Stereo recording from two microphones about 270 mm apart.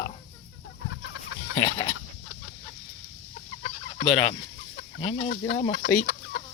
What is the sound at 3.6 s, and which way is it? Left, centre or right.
Fowl, left.